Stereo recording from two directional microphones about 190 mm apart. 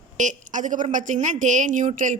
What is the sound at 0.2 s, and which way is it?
A woman's voice, 40° right (ahead or behind).